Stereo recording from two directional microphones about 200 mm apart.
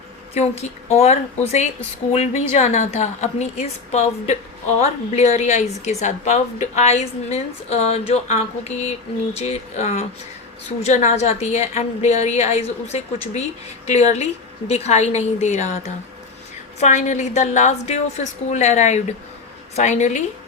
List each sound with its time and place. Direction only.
0.3 s a woman's voice: 35° left (ahead or behind)
16.8 s a woman's voice: 35° left (ahead or behind)